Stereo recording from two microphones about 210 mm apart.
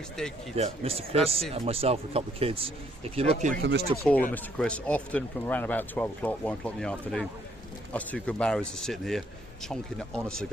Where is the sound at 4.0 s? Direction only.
5° left (ahead or behind).